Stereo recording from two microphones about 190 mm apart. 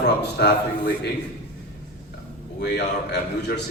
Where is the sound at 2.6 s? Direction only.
60° left (ahead or behind).